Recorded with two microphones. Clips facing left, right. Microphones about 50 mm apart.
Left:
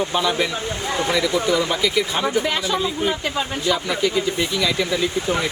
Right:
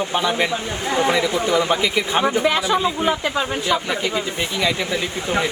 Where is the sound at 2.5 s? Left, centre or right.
Centre.